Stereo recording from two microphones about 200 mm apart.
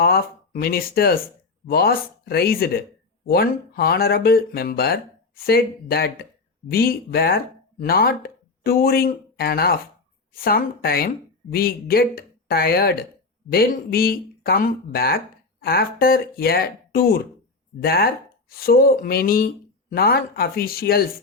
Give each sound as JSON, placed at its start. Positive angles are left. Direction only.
{"t": 0.0, "sound": "speech", "side_deg": 50}